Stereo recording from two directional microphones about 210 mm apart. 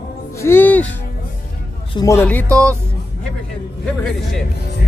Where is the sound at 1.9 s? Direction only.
15° left (ahead or behind).